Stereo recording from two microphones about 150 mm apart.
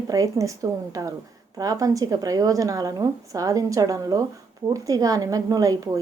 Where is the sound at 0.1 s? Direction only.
20° right (ahead or behind).